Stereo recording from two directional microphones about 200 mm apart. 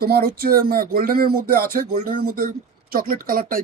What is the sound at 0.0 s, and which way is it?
Speech, 50° right (ahead or behind).